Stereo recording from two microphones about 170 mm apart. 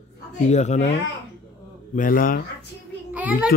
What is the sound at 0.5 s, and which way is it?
Speech, 40° left (ahead or behind).